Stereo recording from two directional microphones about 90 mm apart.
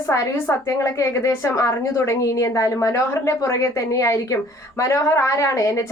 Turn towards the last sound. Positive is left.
turn(degrees=35)  # may be behind; listen again after turning